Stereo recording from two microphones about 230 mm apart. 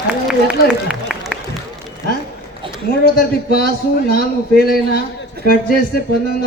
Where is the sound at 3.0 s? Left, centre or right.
Left.